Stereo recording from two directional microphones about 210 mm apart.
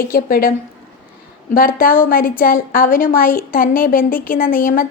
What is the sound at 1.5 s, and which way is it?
A woman's voice, 45° left (ahead or behind).